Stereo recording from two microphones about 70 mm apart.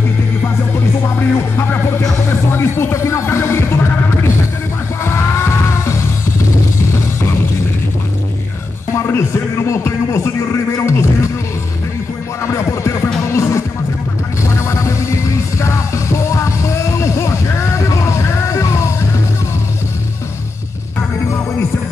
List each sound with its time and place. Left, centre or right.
1.0 s music: left
5.0 s music: left
8.9 s music: left
12.4 s music: left